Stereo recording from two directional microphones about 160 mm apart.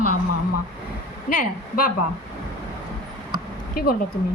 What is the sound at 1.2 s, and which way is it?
Speech, 60° left (ahead or behind).